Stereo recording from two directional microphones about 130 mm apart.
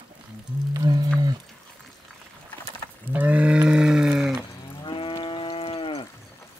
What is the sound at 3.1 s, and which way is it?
Livestock, 10° right (ahead or behind).